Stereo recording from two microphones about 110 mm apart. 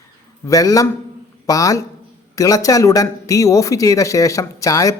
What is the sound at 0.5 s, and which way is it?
Speech, 30° left (ahead or behind).